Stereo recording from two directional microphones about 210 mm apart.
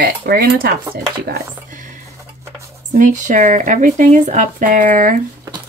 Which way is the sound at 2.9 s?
35° right (ahead or behind).